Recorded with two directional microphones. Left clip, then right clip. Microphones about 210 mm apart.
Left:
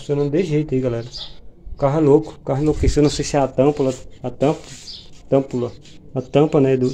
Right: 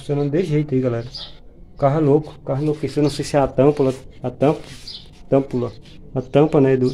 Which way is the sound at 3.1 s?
10° left (ahead or behind).